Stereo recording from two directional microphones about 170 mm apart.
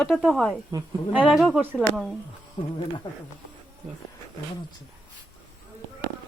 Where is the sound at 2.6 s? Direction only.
30° left (ahead or behind).